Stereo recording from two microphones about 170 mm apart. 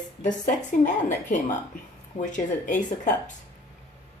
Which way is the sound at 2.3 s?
45° left (ahead or behind).